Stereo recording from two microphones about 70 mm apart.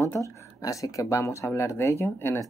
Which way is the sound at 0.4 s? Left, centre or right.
Left.